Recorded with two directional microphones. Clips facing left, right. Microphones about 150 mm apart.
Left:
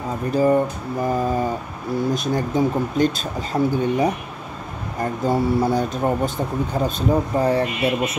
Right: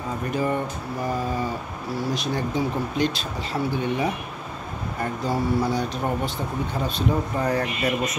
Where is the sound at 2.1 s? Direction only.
45° left (ahead or behind).